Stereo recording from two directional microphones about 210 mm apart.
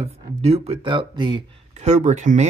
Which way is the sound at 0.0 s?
30° right (ahead or behind).